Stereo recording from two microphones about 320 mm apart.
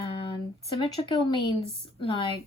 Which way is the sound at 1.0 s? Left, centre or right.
Centre.